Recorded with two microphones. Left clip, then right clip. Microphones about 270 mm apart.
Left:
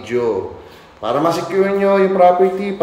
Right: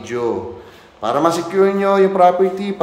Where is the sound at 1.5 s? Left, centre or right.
Centre.